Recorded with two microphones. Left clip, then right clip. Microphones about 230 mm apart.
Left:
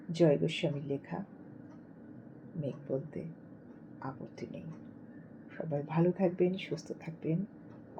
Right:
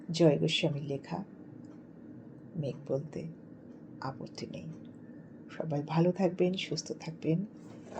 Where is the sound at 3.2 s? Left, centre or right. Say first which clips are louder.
Right 1 dB; right.